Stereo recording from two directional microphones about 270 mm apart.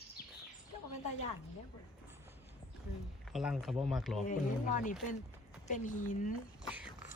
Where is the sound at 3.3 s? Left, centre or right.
Centre.